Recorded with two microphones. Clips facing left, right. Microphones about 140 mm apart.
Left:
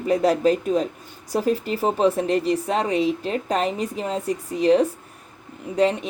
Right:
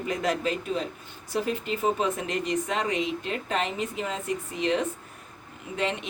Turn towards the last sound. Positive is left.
turn(degrees=40)  # may be behind; listen again after turning